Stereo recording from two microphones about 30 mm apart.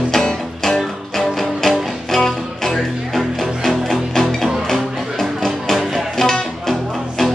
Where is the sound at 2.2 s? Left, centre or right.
Centre.